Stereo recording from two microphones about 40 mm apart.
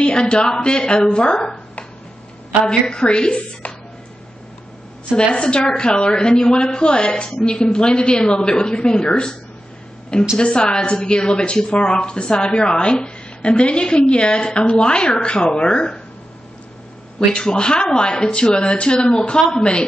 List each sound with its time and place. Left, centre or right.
0.0 s speech: left
2.6 s speech: left
5.1 s speech: left
10.4 s speech: left
17.3 s speech: left